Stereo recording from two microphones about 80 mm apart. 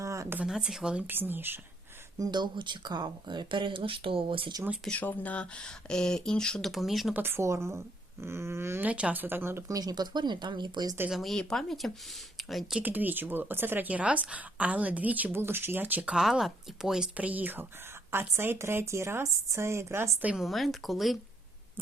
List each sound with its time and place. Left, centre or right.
0.0 s a sound: right
0.4 s speech: centre
1.0 s speech: right
2.1 s speech: right
4.9 s speech: centre
6.7 s speech: centre
7.1 s a woman's voice: right
8.8 s speech: centre
9.6 s speech: right
11.1 s speech: centre
12.8 s speech: right; by 17.1 s centre
17.2 s a woman's voice: centre
20.4 s speech: centre